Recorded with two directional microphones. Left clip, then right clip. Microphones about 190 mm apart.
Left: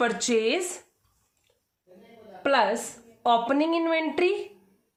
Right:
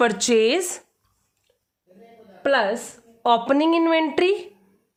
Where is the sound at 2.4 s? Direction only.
35° right (ahead or behind).